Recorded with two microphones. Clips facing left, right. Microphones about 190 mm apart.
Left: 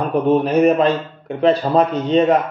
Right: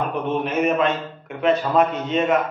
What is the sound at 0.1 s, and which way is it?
A man's voice, 35° left (ahead or behind).